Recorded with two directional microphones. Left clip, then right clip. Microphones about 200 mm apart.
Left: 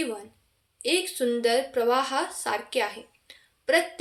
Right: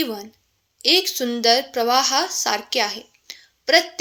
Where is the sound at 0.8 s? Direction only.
40° right (ahead or behind).